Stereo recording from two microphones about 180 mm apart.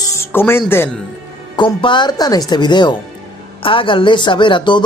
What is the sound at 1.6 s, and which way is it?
Speech, 25° left (ahead or behind).